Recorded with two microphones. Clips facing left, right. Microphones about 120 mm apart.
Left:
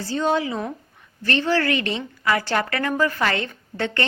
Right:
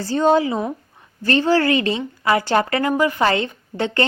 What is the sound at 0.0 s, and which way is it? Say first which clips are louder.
A woman's voice: right 6 dB; 40° right (ahead or behind).